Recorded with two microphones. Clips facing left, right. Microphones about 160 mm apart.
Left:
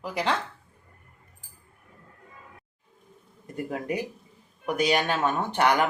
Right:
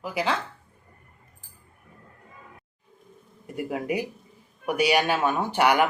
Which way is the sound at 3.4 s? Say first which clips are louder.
Right 2 dB; 10° right (ahead or behind).